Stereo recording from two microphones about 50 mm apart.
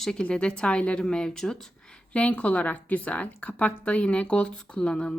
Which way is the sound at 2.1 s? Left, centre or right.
Left.